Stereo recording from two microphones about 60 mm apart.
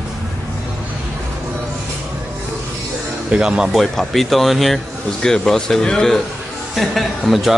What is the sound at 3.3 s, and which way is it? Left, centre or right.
Speech, centre.